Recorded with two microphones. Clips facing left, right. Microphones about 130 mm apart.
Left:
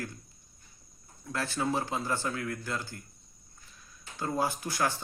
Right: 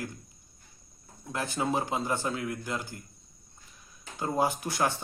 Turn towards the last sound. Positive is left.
turn(degrees=-20)  # may be behind; listen again after turning